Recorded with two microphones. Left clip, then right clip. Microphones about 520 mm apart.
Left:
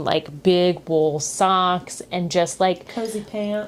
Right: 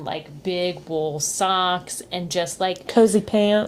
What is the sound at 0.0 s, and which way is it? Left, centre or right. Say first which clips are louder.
Speech: left 8 dB; left.